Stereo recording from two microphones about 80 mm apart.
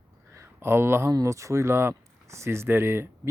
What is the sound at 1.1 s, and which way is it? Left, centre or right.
Speech, right.